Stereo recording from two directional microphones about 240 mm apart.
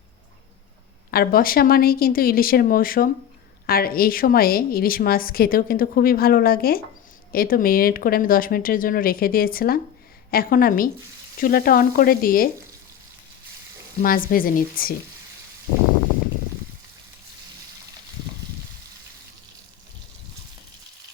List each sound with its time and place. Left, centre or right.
1.1 s a woman's voice: left
14.0 s a woman's voice: left